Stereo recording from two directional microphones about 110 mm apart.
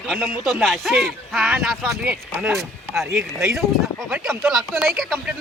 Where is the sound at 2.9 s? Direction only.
25° right (ahead or behind).